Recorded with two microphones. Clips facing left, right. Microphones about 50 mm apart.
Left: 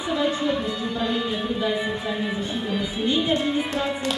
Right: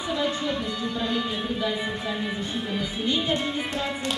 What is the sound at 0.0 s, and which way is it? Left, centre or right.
Music, centre.